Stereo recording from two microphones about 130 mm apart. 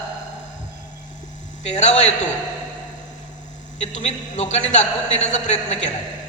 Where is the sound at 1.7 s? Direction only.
60° left (ahead or behind).